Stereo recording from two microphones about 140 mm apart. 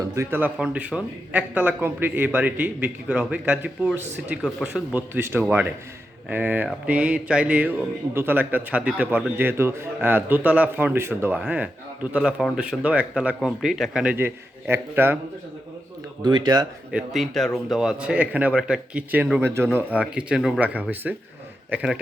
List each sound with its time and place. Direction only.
0.1 s speech: 20° right (ahead or behind)
16.2 s speech: 30° right (ahead or behind)
16.9 s speech: centre (ahead or behind)